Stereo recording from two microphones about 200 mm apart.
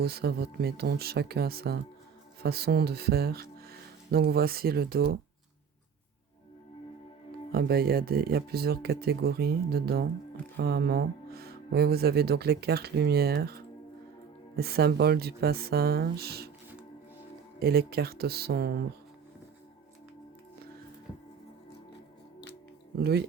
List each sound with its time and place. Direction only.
0.0 s speech: 50° right (ahead or behind)
7.5 s speech: 50° right (ahead or behind)
17.6 s speech: 50° right (ahead or behind)